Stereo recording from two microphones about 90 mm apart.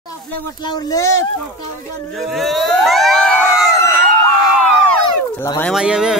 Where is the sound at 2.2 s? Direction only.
Centre (ahead or behind).